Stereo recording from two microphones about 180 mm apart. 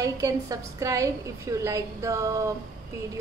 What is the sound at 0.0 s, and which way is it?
A woman's voice, 20° right (ahead or behind).